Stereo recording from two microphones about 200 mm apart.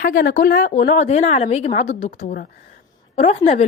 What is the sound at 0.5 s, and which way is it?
A woman's voice, 40° left (ahead or behind).